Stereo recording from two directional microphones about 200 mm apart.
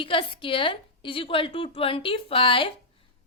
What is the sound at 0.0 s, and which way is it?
A woman's voice, 25° left (ahead or behind).